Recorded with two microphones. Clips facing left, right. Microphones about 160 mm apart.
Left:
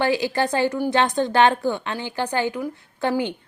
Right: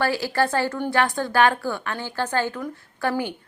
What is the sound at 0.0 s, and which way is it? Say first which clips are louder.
A woman's voice: left 1 dB; 20° left (ahead or behind).